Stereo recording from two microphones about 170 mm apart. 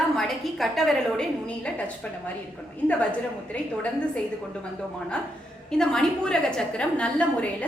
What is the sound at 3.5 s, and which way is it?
Speech, 5° left (ahead or behind).